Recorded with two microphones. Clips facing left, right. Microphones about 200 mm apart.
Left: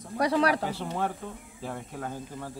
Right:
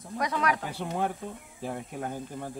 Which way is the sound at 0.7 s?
15° right (ahead or behind).